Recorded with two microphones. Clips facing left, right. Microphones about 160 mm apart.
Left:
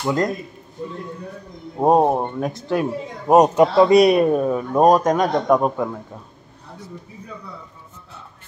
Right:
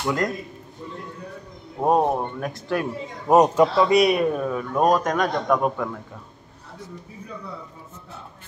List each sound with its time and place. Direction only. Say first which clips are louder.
0.0 s a man's voice: left 3 dB; 30° left (ahead or behind)
1.8 s a man's voice: left 4 dB; 30° left (ahead or behind)
3.7 s a man's voice: left 5 dB; 35° left (ahead or behind)